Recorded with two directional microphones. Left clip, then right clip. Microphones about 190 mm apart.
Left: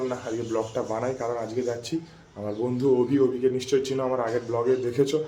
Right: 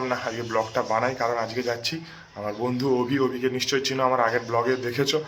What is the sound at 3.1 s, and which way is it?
A man's voice, 5° left (ahead or behind).